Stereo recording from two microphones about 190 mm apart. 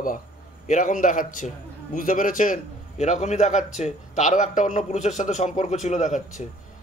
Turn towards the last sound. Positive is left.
turn(degrees=35)  # may be behind; listen again after turning